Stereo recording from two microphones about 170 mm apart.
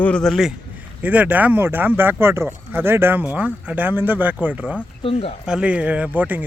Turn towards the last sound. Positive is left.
turn(degrees=-10)  # may be behind; listen again after turning